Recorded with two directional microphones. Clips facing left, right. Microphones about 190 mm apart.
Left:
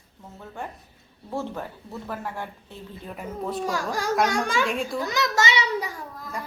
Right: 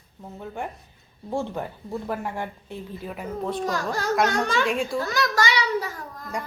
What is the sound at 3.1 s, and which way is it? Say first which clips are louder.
Speech: right 1 dB; centre (ahead or behind).